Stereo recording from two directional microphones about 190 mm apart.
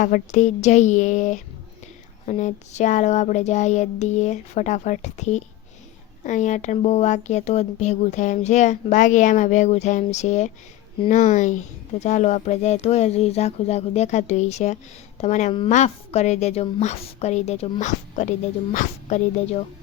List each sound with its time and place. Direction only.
0.0 s speech: 40° left (ahead or behind)